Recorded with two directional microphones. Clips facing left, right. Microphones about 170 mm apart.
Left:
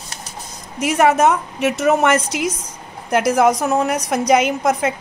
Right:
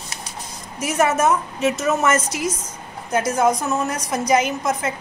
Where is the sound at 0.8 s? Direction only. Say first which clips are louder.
Left 4 dB; 60° left (ahead or behind).